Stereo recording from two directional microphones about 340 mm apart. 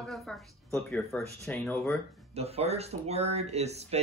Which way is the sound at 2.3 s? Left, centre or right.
Centre.